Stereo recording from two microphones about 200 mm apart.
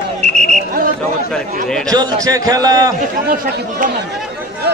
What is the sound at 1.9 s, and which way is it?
A man's voice, 15° right (ahead or behind).